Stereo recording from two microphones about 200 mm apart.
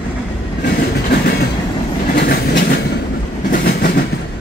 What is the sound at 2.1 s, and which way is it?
Train, 55° left (ahead or behind).